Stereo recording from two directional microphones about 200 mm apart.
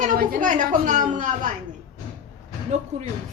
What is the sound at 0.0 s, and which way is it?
A woman's voice, 40° right (ahead or behind).